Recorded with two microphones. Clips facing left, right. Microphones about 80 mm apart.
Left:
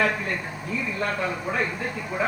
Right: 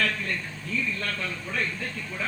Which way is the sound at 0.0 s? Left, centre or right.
Centre.